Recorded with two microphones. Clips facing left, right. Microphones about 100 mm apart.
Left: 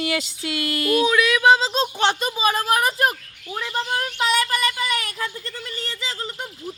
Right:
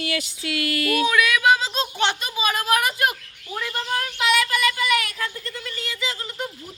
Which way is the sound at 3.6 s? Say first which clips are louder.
Left 2 dB; 30° left (ahead or behind).